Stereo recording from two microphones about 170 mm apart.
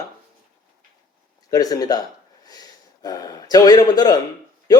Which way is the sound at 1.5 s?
20° left (ahead or behind).